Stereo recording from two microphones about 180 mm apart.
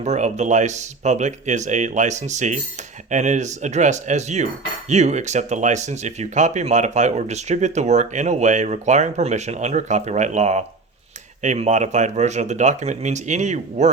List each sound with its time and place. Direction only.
0.0 s speech: 40° right (ahead or behind)